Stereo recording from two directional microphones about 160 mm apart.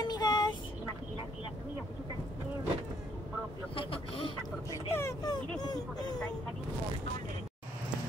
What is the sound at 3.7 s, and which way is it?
Speech, 35° left (ahead or behind).